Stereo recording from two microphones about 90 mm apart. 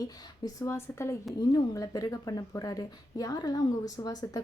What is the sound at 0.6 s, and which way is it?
Speech, 30° left (ahead or behind).